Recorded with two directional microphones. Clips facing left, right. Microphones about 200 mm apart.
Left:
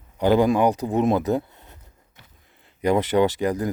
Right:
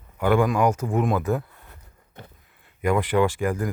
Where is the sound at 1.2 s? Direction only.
25° left (ahead or behind).